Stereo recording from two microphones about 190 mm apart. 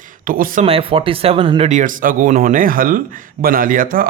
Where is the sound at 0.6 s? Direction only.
30° right (ahead or behind).